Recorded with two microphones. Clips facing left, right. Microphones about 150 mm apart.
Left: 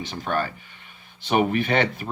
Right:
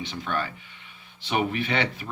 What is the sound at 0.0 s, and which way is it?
Speech, 40° left (ahead or behind).